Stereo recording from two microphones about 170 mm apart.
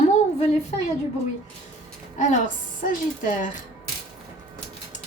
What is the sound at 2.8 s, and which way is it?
Speech, 50° left (ahead or behind).